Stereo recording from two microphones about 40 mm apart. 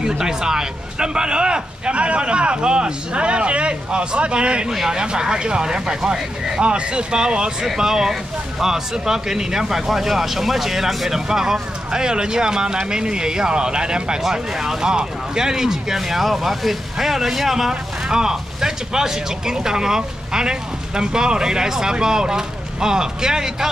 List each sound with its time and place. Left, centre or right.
0.0 s speech: centre
4.6 s speech: centre